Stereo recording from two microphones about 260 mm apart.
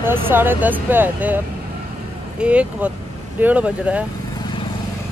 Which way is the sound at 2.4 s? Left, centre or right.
Centre.